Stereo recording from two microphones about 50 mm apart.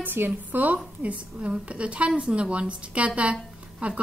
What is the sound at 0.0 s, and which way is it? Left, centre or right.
Speech, right.